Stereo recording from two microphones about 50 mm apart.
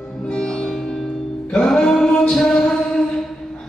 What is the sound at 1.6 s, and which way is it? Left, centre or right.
Music, centre.